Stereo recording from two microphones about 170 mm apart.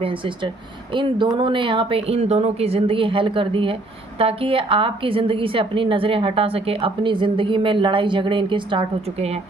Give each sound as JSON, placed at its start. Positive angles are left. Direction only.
{"t": 0.0, "sound": "a woman's voice", "side_deg": -30}